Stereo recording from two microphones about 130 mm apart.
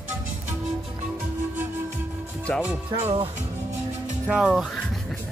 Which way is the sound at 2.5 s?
10° left (ahead or behind).